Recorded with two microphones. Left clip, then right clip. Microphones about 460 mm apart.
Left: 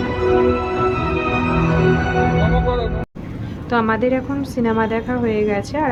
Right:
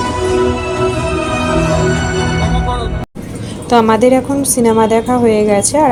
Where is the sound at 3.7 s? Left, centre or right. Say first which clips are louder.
Right 8 dB; left.